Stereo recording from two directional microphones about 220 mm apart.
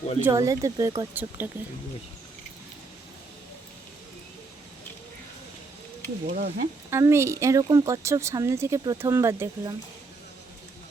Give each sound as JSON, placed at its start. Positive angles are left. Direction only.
{"t": 0.2, "sound": "a woman's voice", "side_deg": -15}
{"t": 6.2, "sound": "speech", "side_deg": -40}
{"t": 6.9, "sound": "a woman's voice", "side_deg": -10}